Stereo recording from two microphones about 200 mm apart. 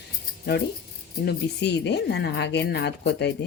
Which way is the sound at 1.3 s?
60° left (ahead or behind).